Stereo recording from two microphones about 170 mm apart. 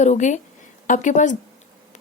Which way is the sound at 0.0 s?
45° left (ahead or behind).